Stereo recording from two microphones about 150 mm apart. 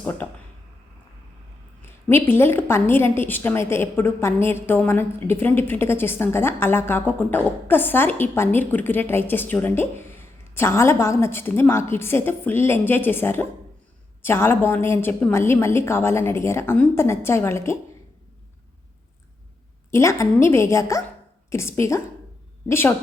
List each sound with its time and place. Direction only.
1.8 s a woman's voice: 15° left (ahead or behind)
19.9 s a woman's voice: 20° left (ahead or behind)